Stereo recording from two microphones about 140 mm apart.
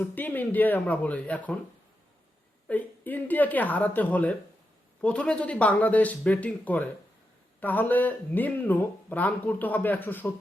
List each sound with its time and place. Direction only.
0.0 s speech: 10° left (ahead or behind)
2.6 s speech: 10° left (ahead or behind)